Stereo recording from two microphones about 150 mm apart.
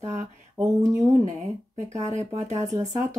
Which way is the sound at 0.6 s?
20° right (ahead or behind).